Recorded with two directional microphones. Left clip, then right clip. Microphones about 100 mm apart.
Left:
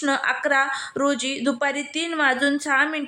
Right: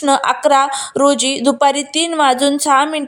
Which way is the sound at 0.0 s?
50° right (ahead or behind).